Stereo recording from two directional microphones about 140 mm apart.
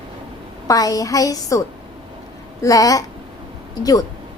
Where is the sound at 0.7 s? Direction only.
25° left (ahead or behind).